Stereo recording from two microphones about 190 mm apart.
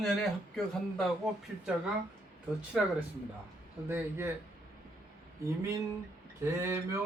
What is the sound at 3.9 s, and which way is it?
Speech, 10° right (ahead or behind).